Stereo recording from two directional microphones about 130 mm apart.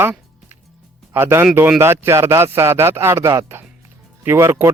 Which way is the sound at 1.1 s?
15° right (ahead or behind).